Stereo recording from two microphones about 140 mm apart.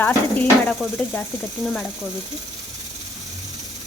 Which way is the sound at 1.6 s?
Centre (ahead or behind).